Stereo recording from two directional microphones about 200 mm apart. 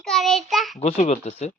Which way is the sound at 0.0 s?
Centre (ahead or behind).